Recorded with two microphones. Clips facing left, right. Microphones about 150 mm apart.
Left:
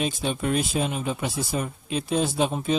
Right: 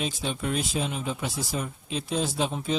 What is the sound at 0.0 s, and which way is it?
Speech, 55° left (ahead or behind).